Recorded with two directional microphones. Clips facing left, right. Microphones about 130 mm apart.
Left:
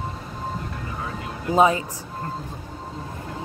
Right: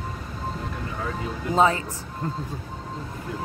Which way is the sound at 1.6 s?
15° left (ahead or behind).